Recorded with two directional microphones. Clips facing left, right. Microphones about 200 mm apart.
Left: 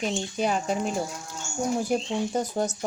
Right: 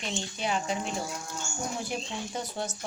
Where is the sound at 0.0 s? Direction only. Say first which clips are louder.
Left 7 dB; 45° left (ahead or behind).